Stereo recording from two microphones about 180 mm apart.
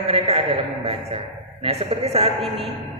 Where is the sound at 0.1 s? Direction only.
30° right (ahead or behind).